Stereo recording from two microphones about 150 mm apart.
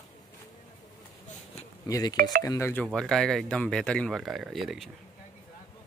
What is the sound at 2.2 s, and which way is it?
Speech, 75° right (ahead or behind).